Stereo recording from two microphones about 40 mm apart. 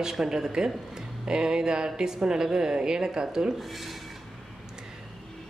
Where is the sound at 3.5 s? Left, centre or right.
Centre.